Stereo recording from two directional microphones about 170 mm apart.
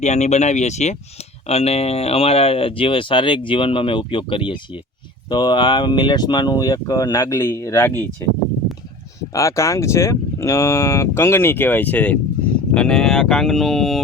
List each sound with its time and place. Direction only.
0.0 s speech: 40° left (ahead or behind); by 8.0 s 15° left (ahead or behind)
9.3 s speech: 15° left (ahead or behind); by 14.0 s centre (ahead or behind)